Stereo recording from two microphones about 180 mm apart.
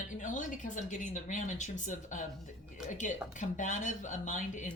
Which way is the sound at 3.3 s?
45° left (ahead or behind).